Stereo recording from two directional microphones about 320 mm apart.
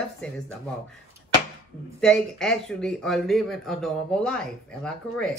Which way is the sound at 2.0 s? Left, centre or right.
Centre.